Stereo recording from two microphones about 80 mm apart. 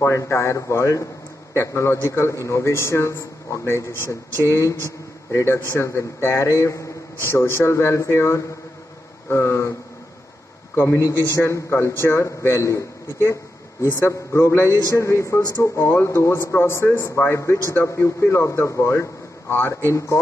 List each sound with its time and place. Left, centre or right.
0.0 s a man's voice: left
10.7 s a man's voice: left